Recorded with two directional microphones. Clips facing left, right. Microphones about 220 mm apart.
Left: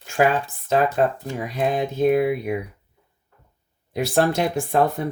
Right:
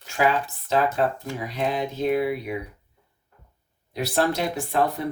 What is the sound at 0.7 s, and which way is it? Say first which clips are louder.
Speech: left 3 dB; 50° left (ahead or behind).